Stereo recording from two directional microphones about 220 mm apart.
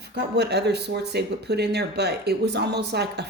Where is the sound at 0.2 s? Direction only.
50° right (ahead or behind).